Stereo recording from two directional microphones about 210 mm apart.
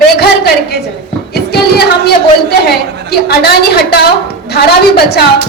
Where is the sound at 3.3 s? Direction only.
50° left (ahead or behind).